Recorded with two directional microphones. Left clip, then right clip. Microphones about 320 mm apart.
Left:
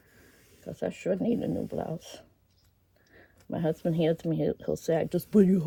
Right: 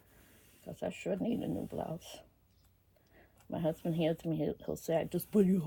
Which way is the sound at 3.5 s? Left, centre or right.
Left.